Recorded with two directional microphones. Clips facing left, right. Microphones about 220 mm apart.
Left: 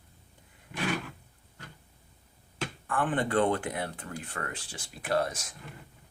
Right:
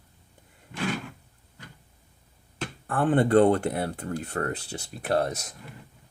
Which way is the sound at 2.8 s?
40° right (ahead or behind).